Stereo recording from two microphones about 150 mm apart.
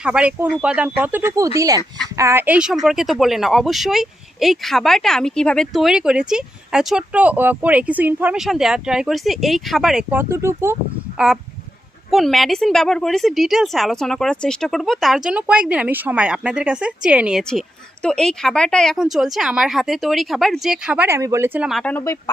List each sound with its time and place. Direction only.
0.0 s speech: 5° right (ahead or behind)
12.1 s speech: centre (ahead or behind)
17.4 s speech: 5° left (ahead or behind); by 21.7 s 15° right (ahead or behind)
21.7 s speech: centre (ahead or behind)
21.9 s speech: 20° left (ahead or behind)